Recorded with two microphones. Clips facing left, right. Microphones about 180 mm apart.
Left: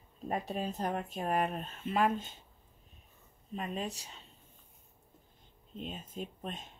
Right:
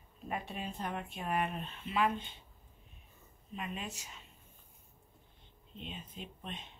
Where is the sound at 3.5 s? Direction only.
40° left (ahead or behind).